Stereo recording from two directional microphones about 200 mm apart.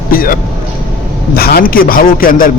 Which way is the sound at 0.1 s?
45° left (ahead or behind).